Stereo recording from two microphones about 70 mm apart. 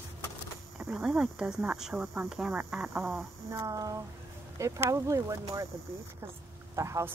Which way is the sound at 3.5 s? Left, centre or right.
Right.